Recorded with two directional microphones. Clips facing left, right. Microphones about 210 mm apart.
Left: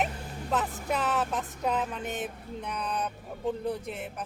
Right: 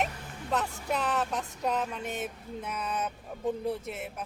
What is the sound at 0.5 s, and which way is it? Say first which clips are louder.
Speech: left 1 dB; centre (ahead or behind).